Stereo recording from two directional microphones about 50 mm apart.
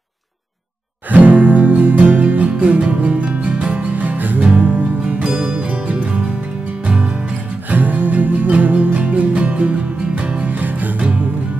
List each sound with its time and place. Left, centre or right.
1.1 s music: right
7.7 s music: right